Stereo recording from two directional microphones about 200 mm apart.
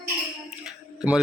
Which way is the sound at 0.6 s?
5° right (ahead or behind).